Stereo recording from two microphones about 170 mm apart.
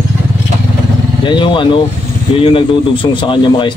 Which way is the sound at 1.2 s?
30° left (ahead or behind).